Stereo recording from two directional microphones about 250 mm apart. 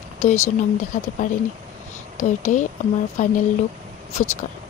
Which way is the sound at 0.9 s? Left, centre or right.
Left.